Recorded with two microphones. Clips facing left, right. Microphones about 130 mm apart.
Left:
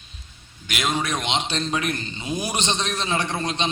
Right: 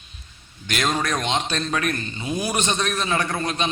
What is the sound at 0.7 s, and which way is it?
A man's voice, 10° left (ahead or behind).